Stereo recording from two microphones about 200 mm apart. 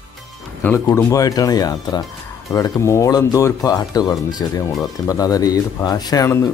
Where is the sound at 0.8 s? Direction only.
15° left (ahead or behind).